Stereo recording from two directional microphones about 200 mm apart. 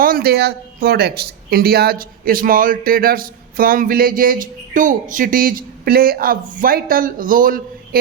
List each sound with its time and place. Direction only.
0.0 s speech: 50° right (ahead or behind)